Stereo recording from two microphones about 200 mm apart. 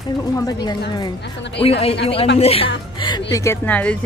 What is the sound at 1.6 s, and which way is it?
A woman's voice, 30° left (ahead or behind).